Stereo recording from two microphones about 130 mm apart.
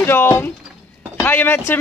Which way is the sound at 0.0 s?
15° left (ahead or behind).